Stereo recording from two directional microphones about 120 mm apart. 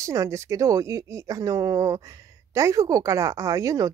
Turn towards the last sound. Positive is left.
turn(degrees=-30)  # may be behind; listen again after turning